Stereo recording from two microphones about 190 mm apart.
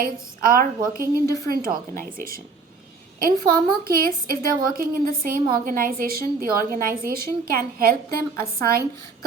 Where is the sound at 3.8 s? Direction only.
50° right (ahead or behind).